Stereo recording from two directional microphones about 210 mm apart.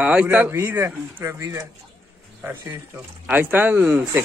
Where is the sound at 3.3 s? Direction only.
10° right (ahead or behind).